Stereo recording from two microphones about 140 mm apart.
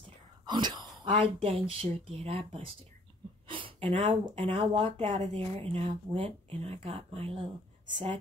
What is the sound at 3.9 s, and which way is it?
Speech, 40° right (ahead or behind).